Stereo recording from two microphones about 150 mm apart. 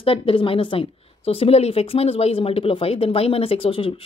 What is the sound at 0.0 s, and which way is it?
Speech, 35° left (ahead or behind).